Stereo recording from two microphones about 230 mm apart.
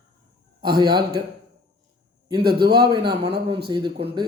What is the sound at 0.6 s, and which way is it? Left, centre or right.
Speech, centre.